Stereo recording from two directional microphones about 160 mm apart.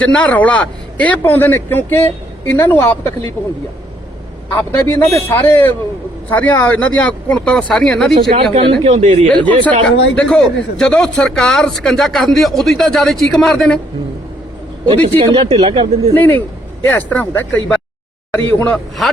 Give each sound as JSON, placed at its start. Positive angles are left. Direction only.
{"t": 0.0, "sound": "speech", "side_deg": 10}
{"t": 4.5, "sound": "speech", "side_deg": 15}
{"t": 8.1, "sound": "speech", "side_deg": -35}
{"t": 8.8, "sound": "speech", "side_deg": -45}
{"t": 9.3, "sound": "speech", "side_deg": -30}
{"t": 10.2, "sound": "a man's voice", "side_deg": 5}
{"t": 15.2, "sound": "speech", "side_deg": -35}
{"t": 16.1, "sound": "speech", "side_deg": 10}